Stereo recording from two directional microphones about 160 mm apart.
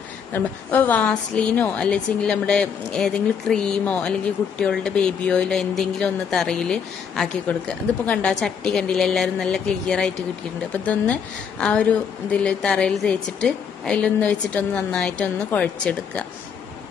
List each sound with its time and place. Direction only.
0.3 s a woman's voice: 10° left (ahead or behind)
11.6 s a woman's voice: 5° left (ahead or behind)